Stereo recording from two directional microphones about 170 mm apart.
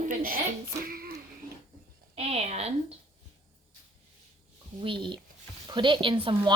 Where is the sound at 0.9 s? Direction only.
60° right (ahead or behind).